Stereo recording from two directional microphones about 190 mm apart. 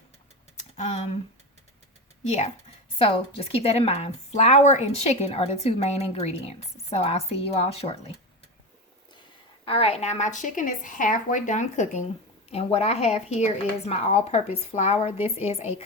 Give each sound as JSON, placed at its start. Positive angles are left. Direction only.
{"t": 0.5, "sound": "typing", "side_deg": 35}
{"t": 3.0, "sound": "speech", "side_deg": 30}
{"t": 9.6, "sound": "speech", "side_deg": 30}